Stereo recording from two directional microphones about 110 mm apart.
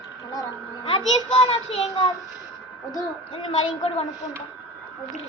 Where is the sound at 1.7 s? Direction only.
70° left (ahead or behind).